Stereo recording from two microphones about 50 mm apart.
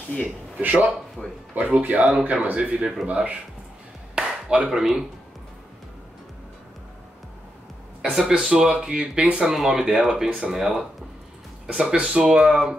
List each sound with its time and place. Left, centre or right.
0.6 s speech: right
1.2 s speech: centre
1.5 s speech: right
4.1 s a sound: centre
8.0 s speech: centre
9.5 s speech: centre
11.6 s speech: centre